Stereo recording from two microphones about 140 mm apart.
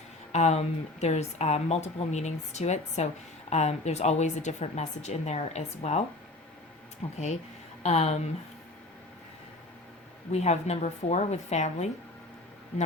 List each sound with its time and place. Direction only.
0.3 s a woman's voice: 50° left (ahead or behind)
7.0 s a woman's voice: 50° left (ahead or behind)
10.3 s a woman's voice: 50° left (ahead or behind)